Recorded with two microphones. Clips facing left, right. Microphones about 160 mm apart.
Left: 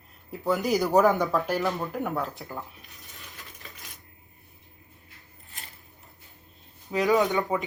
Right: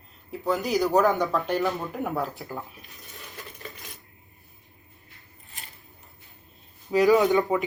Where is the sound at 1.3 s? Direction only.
Centre (ahead or behind).